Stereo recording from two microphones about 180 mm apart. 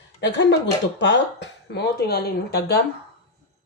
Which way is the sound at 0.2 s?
75° left (ahead or behind).